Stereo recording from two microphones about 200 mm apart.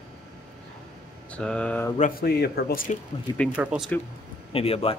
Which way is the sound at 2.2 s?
45° left (ahead or behind).